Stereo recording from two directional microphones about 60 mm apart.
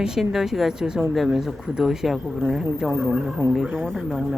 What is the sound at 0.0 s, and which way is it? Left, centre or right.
Speech, centre.